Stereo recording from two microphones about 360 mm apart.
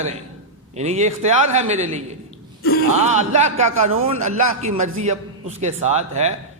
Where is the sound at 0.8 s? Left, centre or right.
Centre.